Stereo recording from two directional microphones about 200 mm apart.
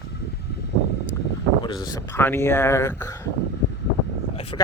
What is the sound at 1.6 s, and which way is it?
Speech, 20° left (ahead or behind).